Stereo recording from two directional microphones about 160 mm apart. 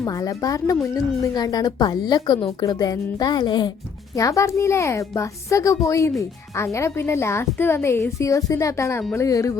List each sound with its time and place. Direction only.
0.0 s a woman's voice: 20° left (ahead or behind)